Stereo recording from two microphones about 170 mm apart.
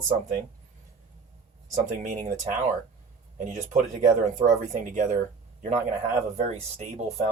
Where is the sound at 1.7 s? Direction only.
45° right (ahead or behind).